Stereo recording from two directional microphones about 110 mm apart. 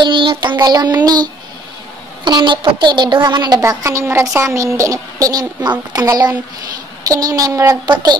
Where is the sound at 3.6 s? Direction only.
30° right (ahead or behind).